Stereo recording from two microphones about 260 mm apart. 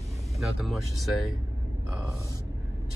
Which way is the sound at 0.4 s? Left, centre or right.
Centre.